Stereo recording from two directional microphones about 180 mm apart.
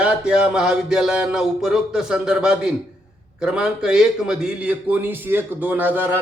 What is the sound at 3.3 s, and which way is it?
A man's voice, 5° right (ahead or behind).